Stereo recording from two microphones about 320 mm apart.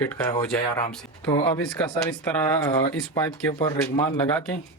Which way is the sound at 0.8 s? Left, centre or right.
Centre.